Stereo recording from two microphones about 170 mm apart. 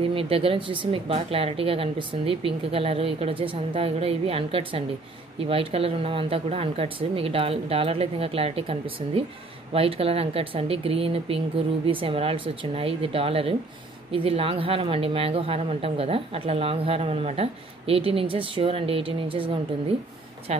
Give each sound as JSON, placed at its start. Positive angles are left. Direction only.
{"t": 0.0, "sound": "speech", "side_deg": -35}